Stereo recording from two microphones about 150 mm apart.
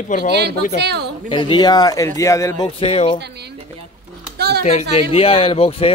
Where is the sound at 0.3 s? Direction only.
90° right.